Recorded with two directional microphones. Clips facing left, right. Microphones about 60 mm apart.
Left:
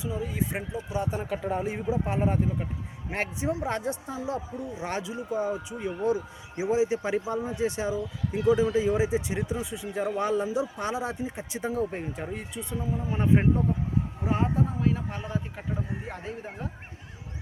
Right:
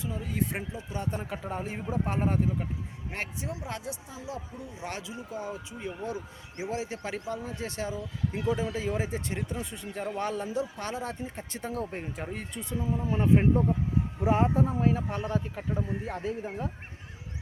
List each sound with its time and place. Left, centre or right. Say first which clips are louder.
0.0 s speech: left 2 dB; centre
1.7 s speech: left 3 dB; centre
3.1 s speech: left 7 dB; left
4.6 s speech: left 6 dB; left
5.5 s speech: left 5 dB; centre
8.3 s speech: left 8 dB; centre
13.1 s speech: even; centre
14.3 s speech: right 3 dB; centre
14.9 s speech: right 2 dB; centre